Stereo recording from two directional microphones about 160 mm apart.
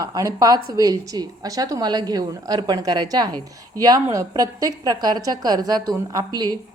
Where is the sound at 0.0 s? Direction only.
20° right (ahead or behind).